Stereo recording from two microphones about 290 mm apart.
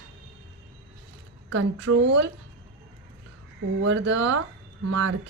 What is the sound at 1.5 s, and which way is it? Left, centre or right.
Speech, right.